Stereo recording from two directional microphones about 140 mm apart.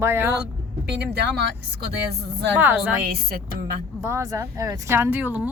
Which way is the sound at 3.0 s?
90° right.